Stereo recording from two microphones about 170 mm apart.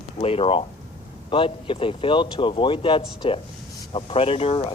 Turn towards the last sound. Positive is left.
turn(degrees=35)  # may be behind; listen again after turning